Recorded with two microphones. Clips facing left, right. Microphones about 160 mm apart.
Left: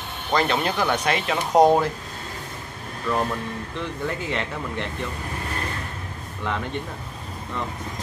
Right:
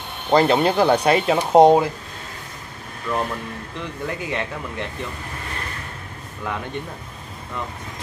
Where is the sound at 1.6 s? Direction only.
15° right (ahead or behind).